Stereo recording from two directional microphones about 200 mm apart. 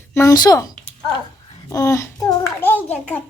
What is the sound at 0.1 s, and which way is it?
A child's voice, 15° left (ahead or behind).